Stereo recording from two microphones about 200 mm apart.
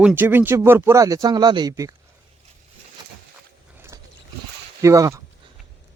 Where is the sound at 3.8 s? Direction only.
15° right (ahead or behind).